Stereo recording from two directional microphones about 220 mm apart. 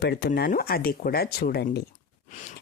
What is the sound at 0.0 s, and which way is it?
Speech, 45° left (ahead or behind).